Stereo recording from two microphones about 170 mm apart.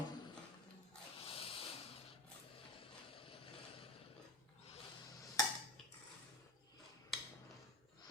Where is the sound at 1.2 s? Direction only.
35° left (ahead or behind).